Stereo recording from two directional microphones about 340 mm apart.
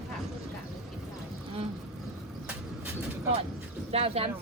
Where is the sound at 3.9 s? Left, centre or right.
Centre.